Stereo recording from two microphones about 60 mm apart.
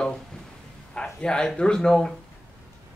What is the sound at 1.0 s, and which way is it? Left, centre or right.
Speech, centre.